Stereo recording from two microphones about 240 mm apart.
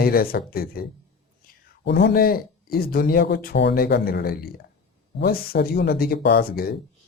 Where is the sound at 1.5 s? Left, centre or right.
Left.